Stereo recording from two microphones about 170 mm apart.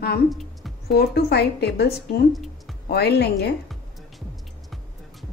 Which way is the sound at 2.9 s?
70° left (ahead or behind).